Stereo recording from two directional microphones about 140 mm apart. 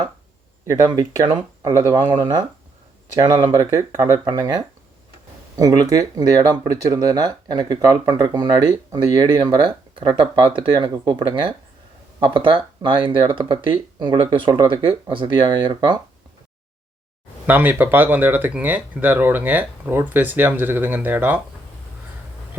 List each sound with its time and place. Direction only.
0.6 s speech: 25° right (ahead or behind)
17.4 s speech: 15° right (ahead or behind)